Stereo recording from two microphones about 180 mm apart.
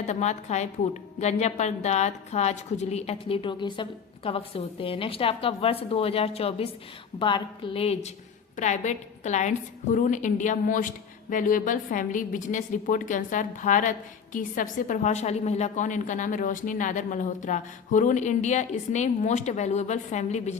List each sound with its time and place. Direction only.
0.0 s a woman's voice: 40° left (ahead or behind)